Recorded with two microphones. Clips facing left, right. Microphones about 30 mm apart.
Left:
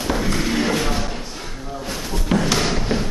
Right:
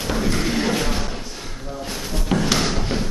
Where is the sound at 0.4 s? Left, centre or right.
Centre.